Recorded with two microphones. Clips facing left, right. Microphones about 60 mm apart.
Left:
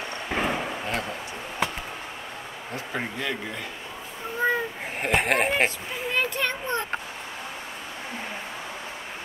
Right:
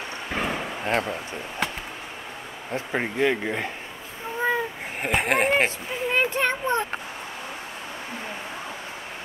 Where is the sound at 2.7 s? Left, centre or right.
Right.